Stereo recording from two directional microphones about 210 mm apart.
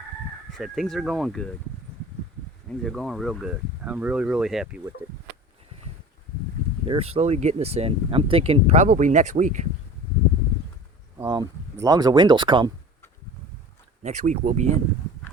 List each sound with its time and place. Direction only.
0.5 s speech: centre (ahead or behind)
2.6 s speech: centre (ahead or behind)
6.8 s speech: 25° right (ahead or behind)
11.2 s speech: 15° right (ahead or behind)
14.0 s speech: 35° right (ahead or behind)